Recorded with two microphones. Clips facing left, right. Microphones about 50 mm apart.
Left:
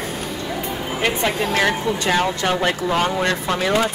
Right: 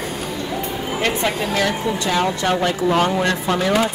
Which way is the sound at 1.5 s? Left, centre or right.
Left.